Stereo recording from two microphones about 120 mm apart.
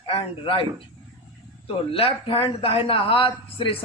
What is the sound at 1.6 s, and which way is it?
Speech, 50° left (ahead or behind).